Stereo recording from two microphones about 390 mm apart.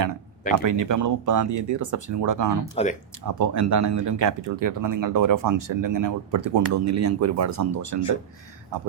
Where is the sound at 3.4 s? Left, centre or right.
Right.